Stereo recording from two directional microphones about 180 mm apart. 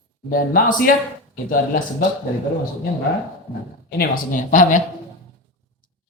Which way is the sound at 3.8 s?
55° left (ahead or behind).